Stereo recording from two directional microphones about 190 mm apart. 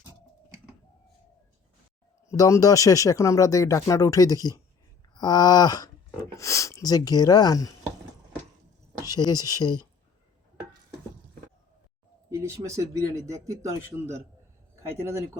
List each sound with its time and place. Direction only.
2.3 s speech: 20° left (ahead or behind)
5.1 s rub: 20° left (ahead or behind)
9.0 s rub: 20° left (ahead or behind)
12.3 s speech: 15° right (ahead or behind)